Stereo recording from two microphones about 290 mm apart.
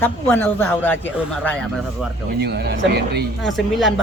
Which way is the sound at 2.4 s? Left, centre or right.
Right.